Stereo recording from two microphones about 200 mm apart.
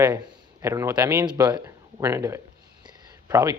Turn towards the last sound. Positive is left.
turn(degrees=-15)  # may be behind; listen again after turning